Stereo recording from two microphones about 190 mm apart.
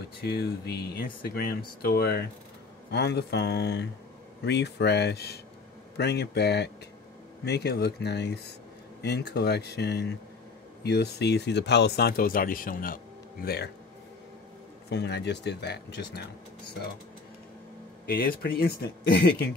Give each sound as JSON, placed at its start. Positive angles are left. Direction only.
{"t": 0.2, "sound": "speech", "side_deg": 55}
{"t": 14.9, "sound": "speech", "side_deg": 65}
{"t": 18.0, "sound": "speech", "side_deg": 55}